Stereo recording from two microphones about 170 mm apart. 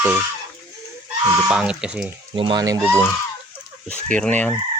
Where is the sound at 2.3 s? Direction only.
30° right (ahead or behind).